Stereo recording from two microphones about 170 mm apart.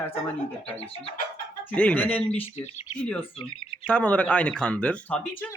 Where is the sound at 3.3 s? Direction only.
35° left (ahead or behind).